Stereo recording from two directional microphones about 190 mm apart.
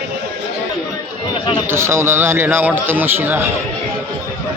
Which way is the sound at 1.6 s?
15° right (ahead or behind).